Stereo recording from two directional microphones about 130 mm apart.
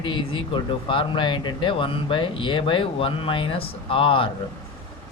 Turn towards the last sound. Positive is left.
turn(degrees=45)  # may be behind; listen again after turning